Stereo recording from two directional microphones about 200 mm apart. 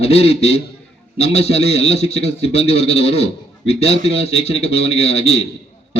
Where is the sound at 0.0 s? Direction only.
30° left (ahead or behind).